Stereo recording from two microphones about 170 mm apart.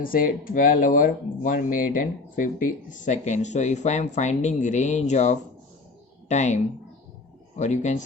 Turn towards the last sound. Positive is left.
turn(degrees=45)  # may be behind; listen again after turning